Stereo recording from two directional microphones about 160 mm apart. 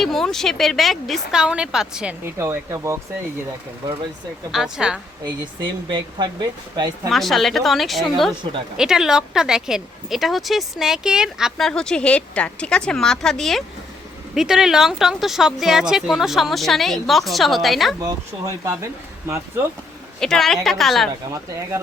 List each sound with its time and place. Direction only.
0.0 s speech: centre (ahead or behind)
2.4 s speech: 20° right (ahead or behind)
4.5 s speech: 5° right (ahead or behind)
5.2 s speech: 30° right (ahead or behind)
7.1 s speech: centre (ahead or behind)
20.1 s speech: 5° left (ahead or behind)